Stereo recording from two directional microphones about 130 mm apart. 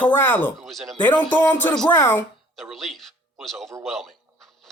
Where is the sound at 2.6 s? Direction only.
Centre (ahead or behind).